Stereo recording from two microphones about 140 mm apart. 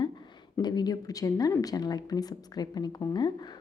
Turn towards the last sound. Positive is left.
turn(degrees=30)  # may be behind; listen again after turning